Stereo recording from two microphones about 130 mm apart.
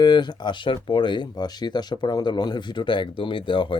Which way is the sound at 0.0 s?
35° left (ahead or behind).